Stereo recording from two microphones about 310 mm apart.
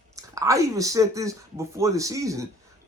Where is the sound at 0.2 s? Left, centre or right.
Centre.